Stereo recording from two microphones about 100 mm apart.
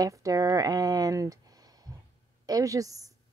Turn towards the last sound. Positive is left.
turn(degrees=-35)  # may be behind; listen again after turning